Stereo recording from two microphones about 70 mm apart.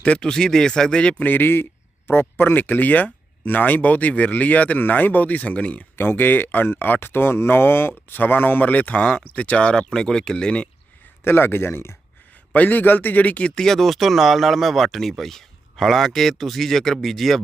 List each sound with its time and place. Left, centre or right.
0.0 s speech: centre
1.3 s speech: left; by 10.7 s centre
11.2 s speech: left
12.5 s speech: left
13.6 s speech: centre